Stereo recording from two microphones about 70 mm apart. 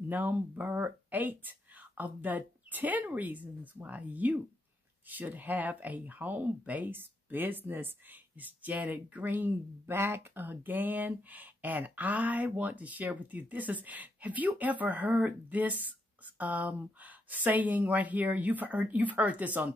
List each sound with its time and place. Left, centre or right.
0.1 s speech: right